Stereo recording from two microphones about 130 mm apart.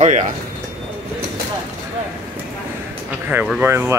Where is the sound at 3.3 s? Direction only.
10° right (ahead or behind).